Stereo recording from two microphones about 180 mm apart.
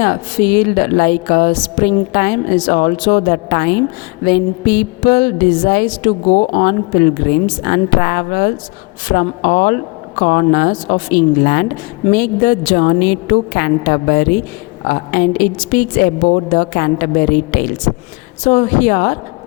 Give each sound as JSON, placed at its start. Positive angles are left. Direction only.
{"t": 0.0, "sound": "a woman's voice", "side_deg": 50}